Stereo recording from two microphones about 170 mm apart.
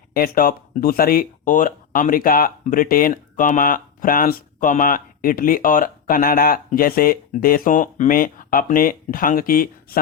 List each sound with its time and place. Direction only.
0.1 s speech: 60° left (ahead or behind)